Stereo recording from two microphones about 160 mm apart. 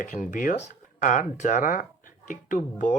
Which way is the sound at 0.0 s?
55° left (ahead or behind).